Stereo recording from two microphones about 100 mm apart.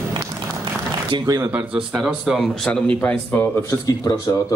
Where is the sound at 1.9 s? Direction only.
5° right (ahead or behind).